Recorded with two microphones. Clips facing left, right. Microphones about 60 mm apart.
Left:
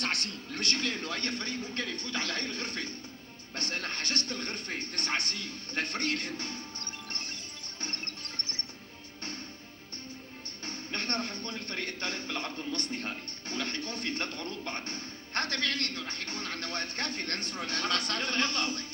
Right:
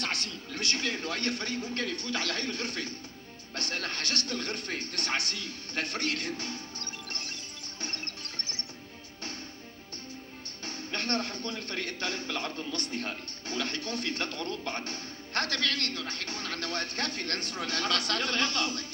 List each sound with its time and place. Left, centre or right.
0.0 s speech: left
7.8 s music: left
10.7 s speech: left